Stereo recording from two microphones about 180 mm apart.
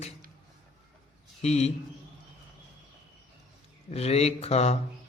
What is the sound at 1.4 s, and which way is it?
Speech, 35° left (ahead or behind).